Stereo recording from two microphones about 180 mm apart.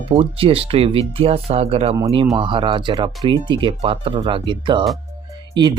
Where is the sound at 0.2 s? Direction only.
30° right (ahead or behind).